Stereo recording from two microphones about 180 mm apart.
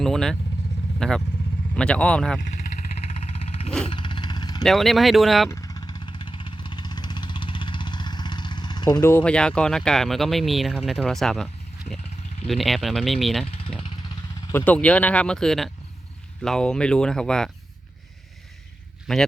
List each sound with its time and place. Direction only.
0.0 s speech: centre (ahead or behind)
3.3 s a sound: 35° left (ahead or behind)
3.8 s vehicle: 25° left (ahead or behind)
4.6 s speech: centre (ahead or behind)
5.5 s vehicle: 20° left (ahead or behind)
9.0 s speech: 10° left (ahead or behind)
12.5 s speech: centre (ahead or behind)
13.4 s vehicle: 30° left (ahead or behind)
14.5 s speech: 10° left (ahead or behind)
19.1 s speech: centre (ahead or behind)